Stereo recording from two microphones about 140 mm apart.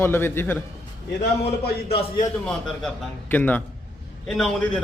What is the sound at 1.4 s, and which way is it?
Speech, 45° left (ahead or behind).